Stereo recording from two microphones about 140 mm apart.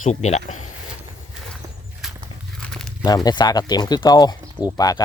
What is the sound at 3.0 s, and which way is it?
Speech, 30° left (ahead or behind).